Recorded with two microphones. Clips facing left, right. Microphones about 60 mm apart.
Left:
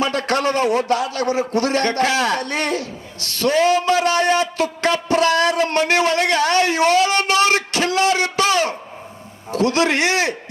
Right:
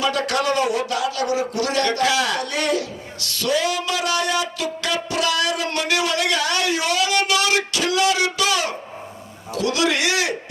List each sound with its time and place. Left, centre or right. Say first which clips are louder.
0.0 s a man's voice: left 2 dB; left
5.0 s a sound: left 6 dB; left
9.5 s a man's voice: left 3 dB; left